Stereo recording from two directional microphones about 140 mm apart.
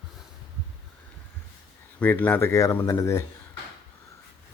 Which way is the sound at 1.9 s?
10° left (ahead or behind).